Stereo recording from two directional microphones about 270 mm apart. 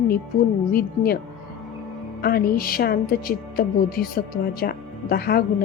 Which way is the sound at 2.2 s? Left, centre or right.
Left.